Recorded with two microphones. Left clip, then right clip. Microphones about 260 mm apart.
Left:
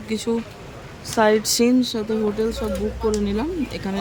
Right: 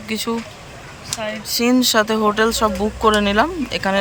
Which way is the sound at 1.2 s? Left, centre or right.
Centre.